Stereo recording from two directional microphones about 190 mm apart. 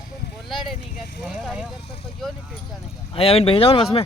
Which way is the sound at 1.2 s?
Centre (ahead or behind).